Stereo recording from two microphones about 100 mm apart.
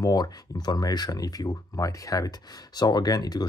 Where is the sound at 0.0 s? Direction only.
45° left (ahead or behind).